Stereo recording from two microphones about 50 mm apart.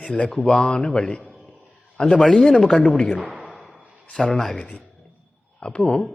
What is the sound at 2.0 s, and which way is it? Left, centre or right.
A man's voice, centre.